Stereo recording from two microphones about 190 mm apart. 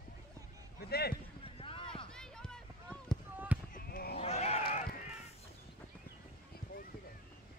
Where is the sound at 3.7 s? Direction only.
55° left (ahead or behind).